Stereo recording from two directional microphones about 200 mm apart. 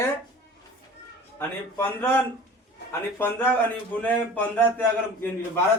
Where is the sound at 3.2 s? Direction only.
10° left (ahead or behind).